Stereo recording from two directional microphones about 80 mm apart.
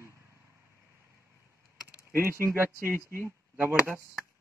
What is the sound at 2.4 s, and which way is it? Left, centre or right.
Speech, right.